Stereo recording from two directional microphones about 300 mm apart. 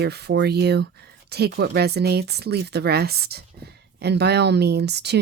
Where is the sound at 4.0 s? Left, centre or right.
Right.